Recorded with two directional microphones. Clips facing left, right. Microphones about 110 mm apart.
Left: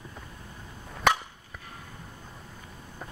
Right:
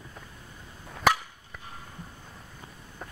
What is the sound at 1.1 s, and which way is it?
Chop, 5° right (ahead or behind).